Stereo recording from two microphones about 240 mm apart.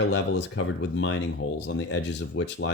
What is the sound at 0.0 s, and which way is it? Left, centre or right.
Speech, left.